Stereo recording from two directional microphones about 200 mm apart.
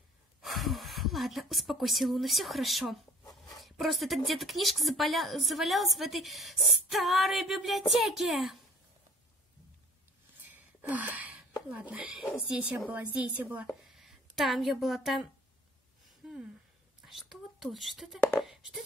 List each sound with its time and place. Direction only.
0.4 s speech: centre (ahead or behind)
11.1 s a sound: 5° right (ahead or behind)
11.9 s a woman's voice: 5° right (ahead or behind)
17.0 s speech: centre (ahead or behind)